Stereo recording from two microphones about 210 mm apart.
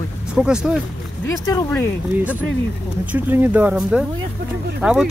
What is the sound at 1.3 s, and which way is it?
Speech, 15° left (ahead or behind).